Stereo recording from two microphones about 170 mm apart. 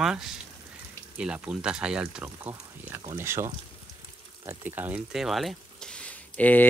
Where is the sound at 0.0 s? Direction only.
5° right (ahead or behind).